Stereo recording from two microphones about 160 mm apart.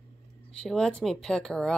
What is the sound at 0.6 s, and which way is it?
Speech, 5° left (ahead or behind).